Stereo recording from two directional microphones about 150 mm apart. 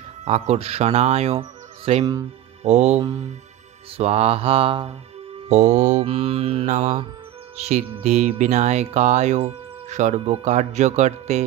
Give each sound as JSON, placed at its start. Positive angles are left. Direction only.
{"t": 0.2, "sound": "music", "side_deg": -45}
{"t": 3.9, "sound": "mantra", "side_deg": -40}
{"t": 5.5, "sound": "music", "side_deg": -50}